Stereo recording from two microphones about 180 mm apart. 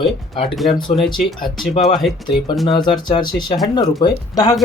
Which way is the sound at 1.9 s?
Centre (ahead or behind).